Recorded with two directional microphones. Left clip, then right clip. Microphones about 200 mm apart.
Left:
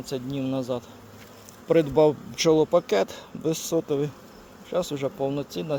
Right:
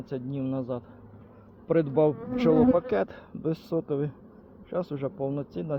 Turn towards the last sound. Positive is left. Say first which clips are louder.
# left 4 dB
turn(degrees=15)  # may be behind; listen again after turning